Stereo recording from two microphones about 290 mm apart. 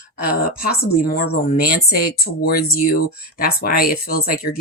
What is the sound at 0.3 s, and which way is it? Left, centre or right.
Speech, left.